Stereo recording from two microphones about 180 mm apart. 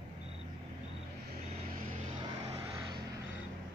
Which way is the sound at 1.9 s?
35° right (ahead or behind).